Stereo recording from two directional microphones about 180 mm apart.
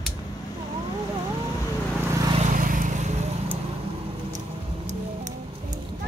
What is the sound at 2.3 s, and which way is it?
Vehicle, 45° right (ahead or behind).